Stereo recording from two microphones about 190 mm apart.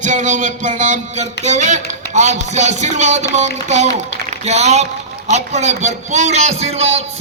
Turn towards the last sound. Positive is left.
turn(degrees=-35)  # may be behind; listen again after turning